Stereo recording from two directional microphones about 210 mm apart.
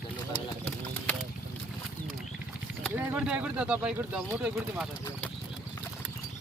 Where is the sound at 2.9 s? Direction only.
5° right (ahead or behind).